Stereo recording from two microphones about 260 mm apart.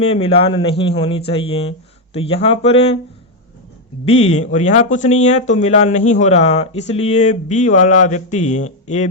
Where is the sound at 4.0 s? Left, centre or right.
Left.